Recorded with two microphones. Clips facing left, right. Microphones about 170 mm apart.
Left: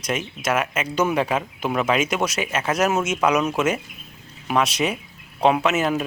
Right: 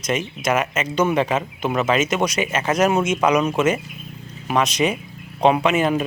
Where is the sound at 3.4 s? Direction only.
10° right (ahead or behind).